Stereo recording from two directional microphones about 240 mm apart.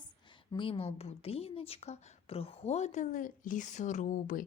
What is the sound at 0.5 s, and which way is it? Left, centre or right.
A woman's voice, left.